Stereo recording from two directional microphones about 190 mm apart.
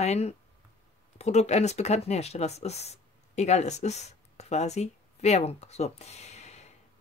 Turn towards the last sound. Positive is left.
turn(degrees=35)  # may be behind; listen again after turning